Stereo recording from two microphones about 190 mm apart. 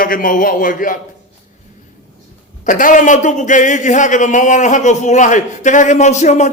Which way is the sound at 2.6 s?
45° left (ahead or behind).